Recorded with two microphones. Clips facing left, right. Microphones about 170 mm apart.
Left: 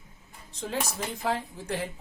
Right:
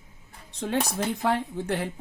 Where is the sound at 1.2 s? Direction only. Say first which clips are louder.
Right 2 dB; 65° right (ahead or behind).